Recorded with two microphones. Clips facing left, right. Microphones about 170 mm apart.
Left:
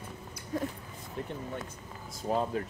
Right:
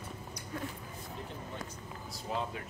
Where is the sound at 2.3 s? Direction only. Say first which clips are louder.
Left 7 dB; 45° left (ahead or behind).